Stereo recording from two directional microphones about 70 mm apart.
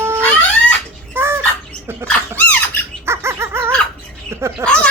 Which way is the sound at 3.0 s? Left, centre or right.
Right.